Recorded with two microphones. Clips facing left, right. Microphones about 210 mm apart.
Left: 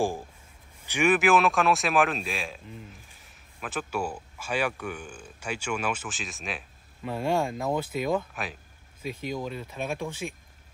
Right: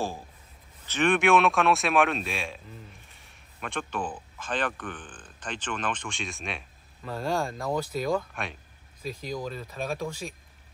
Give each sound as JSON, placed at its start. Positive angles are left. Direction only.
{"t": 0.8, "sound": "a man's voice", "side_deg": 10}
{"t": 9.0, "sound": "speech", "side_deg": -35}
{"t": 9.4, "sound": "a man's voice", "side_deg": 0}